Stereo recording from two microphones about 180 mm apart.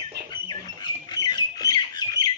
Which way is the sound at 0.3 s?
25° left (ahead or behind).